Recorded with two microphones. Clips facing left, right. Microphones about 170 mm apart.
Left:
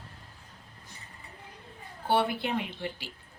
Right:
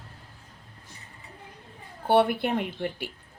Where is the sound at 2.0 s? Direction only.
55° right (ahead or behind).